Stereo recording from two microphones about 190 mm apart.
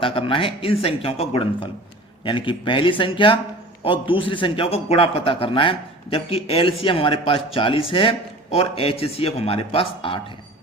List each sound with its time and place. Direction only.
0.0 s a man's voice: 25° left (ahead or behind)